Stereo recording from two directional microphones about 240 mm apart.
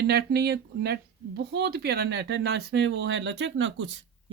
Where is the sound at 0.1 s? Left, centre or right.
Right.